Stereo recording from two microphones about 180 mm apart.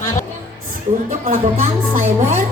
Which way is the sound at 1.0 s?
40° right (ahead or behind).